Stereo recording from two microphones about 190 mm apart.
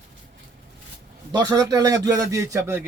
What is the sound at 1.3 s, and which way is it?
Speech, 20° right (ahead or behind).